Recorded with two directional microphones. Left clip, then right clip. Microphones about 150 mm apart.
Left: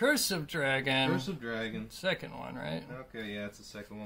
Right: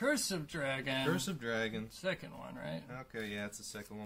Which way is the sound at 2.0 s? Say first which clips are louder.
Left 7 dB; 35° left (ahead or behind).